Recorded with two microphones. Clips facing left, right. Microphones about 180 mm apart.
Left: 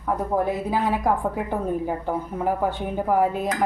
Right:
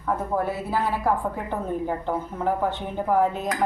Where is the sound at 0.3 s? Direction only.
15° left (ahead or behind).